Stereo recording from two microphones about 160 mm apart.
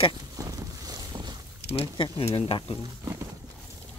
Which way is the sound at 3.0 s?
20° right (ahead or behind).